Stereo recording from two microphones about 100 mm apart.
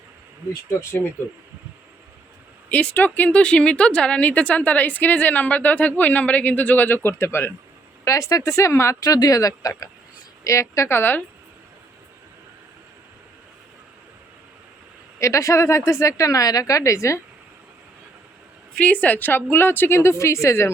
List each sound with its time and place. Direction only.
0.7 s a woman's voice: 30° left (ahead or behind)
2.6 s speech: 15° left (ahead or behind)
9.0 s a woman's voice: 40° left (ahead or behind); by 11.2 s 20° left (ahead or behind)
15.2 s speech: 30° left (ahead or behind)
18.8 s a woman's voice: 15° left (ahead or behind)